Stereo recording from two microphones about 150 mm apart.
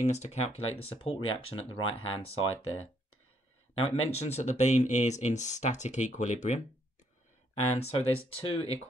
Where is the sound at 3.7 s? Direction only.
45° left (ahead or behind).